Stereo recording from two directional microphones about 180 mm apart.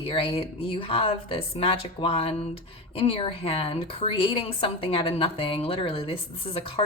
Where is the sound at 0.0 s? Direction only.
30° left (ahead or behind).